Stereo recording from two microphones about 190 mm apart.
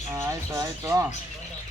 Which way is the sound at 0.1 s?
15° right (ahead or behind).